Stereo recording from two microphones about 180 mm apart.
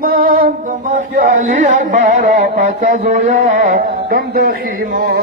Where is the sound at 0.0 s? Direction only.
55° right (ahead or behind).